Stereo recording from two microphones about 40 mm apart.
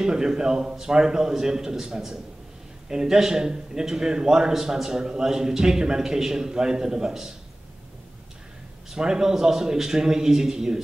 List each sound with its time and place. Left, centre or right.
0.0 s a man's voice: centre
8.9 s a man's voice: centre